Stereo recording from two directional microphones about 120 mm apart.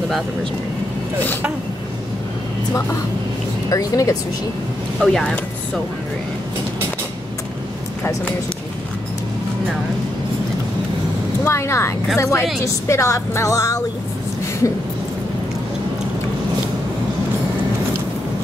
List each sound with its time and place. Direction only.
3.7 s speech: 30° left (ahead or behind)
5.0 s speech: 5° left (ahead or behind)
8.0 s speech: 20° left (ahead or behind)
11.4 s speech: 20° left (ahead or behind)